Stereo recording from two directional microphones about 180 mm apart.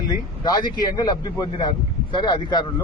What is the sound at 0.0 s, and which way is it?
A man's voice, 25° left (ahead or behind).